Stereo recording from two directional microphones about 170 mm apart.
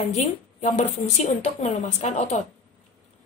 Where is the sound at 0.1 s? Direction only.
40° left (ahead or behind).